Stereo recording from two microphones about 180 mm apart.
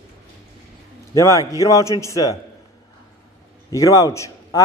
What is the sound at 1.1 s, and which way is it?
A man's voice, 20° left (ahead or behind).